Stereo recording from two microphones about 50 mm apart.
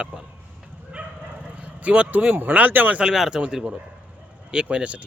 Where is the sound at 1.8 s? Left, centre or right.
Right.